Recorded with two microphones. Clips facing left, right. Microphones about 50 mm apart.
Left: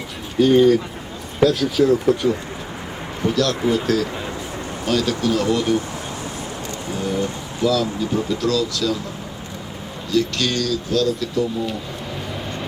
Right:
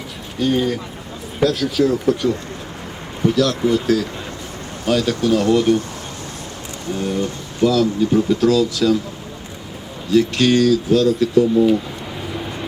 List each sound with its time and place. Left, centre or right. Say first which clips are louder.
0.3 s speech: left 6 dB; centre
6.9 s speech: right 2 dB; centre
7.6 s speech: right 4 dB; centre
10.1 s speech: right 6 dB; right
11.3 s speech: right 9 dB; centre